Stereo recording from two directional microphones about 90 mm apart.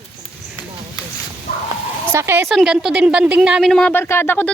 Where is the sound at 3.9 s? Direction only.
25° left (ahead or behind).